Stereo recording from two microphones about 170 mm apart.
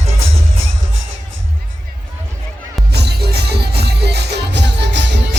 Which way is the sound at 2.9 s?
75° right (ahead or behind).